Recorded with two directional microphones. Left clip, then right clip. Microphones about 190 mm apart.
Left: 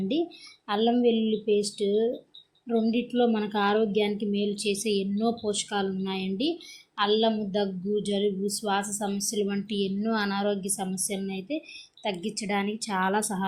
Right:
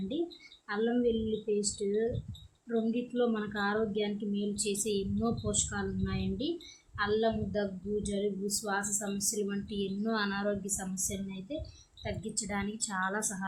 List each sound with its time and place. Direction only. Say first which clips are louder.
0.7 s a woman's voice: left 7 dB; 20° left (ahead or behind)